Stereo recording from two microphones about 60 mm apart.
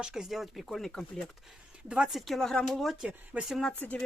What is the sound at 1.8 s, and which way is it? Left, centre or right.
Speech, centre.